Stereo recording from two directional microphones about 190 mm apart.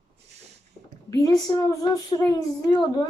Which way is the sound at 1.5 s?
20° left (ahead or behind).